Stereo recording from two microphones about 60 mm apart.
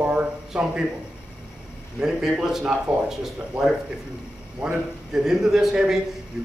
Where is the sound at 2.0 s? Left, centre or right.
Centre.